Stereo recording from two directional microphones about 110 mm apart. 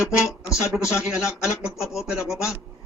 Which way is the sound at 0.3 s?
5° right (ahead or behind).